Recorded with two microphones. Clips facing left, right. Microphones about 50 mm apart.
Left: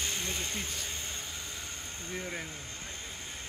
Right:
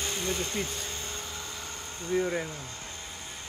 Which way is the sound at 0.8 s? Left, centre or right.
Centre.